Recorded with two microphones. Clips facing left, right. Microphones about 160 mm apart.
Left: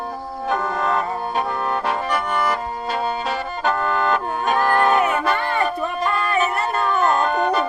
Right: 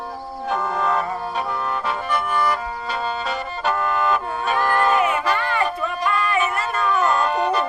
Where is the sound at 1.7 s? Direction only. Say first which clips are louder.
Left 2 dB; 45° left (ahead or behind).